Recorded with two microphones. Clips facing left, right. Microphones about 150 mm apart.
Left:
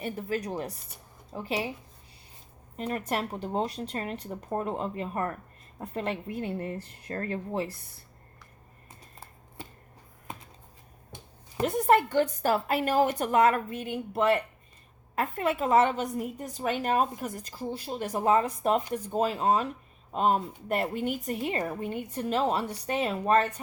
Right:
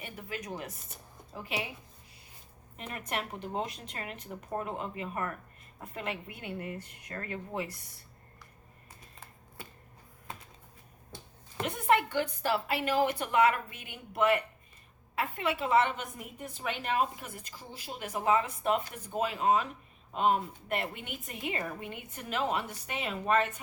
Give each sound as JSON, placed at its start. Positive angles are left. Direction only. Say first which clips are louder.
{"t": 0.0, "sound": "a woman's voice", "louder": "left 9 dB", "side_deg": 40}
{"t": 2.7, "sound": "a woman's voice", "louder": "left 7 dB", "side_deg": 35}
{"t": 8.9, "sound": "a sound", "louder": "left 3 dB", "side_deg": 30}
{"t": 11.1, "sound": "finger snapping", "louder": "left 1 dB", "side_deg": 20}
{"t": 11.6, "sound": "a woman's voice", "louder": "left 5 dB", "side_deg": 40}